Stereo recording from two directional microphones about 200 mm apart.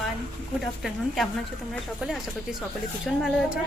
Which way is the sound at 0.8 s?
Centre (ahead or behind).